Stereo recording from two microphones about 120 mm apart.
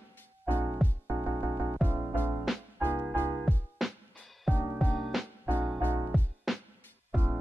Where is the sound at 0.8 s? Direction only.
Centre (ahead or behind).